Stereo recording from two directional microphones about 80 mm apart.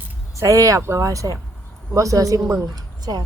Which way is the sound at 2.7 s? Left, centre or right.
Right.